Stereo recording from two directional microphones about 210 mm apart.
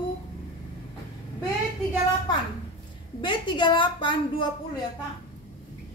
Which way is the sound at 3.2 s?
20° left (ahead or behind).